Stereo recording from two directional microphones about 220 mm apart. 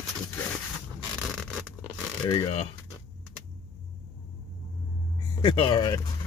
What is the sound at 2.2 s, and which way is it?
Speech, 20° left (ahead or behind).